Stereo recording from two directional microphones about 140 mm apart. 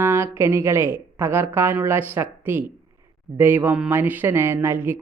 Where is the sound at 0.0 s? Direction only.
20° right (ahead or behind).